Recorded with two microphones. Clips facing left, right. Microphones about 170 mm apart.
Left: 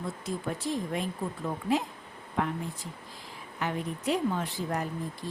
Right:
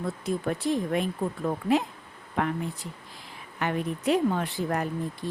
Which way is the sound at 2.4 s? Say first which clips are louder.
Right 3 dB; 65° right (ahead or behind).